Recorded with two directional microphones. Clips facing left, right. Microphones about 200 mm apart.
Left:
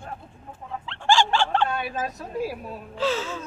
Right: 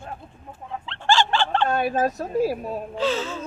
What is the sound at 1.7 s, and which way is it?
Speech, 45° right (ahead or behind).